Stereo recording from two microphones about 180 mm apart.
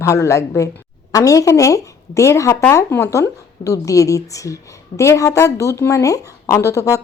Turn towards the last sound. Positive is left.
turn(degrees=15)  # may be behind; listen again after turning